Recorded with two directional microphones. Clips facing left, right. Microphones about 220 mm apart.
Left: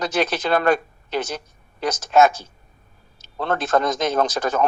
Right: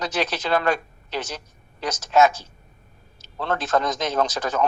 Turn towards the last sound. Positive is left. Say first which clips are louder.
# left 2 dB
turn(degrees=55)  # may be behind; listen again after turning